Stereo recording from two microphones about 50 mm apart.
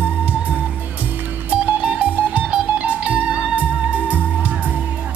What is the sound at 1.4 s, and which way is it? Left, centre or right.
Music, right.